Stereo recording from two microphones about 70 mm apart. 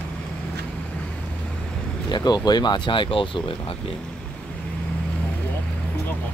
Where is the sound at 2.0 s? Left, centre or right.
Left.